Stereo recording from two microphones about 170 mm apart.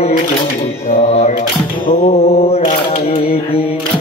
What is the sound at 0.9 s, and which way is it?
Camera, 40° left (ahead or behind).